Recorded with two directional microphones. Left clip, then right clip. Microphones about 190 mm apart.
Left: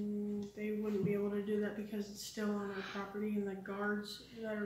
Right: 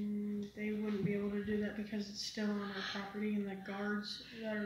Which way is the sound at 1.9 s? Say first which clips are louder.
Right 2 dB; 15° left (ahead or behind).